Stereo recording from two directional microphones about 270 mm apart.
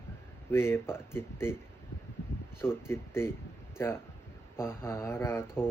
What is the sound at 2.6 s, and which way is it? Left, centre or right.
Speech, centre.